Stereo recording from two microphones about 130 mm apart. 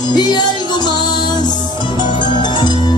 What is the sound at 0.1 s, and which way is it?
Music, 35° left (ahead or behind).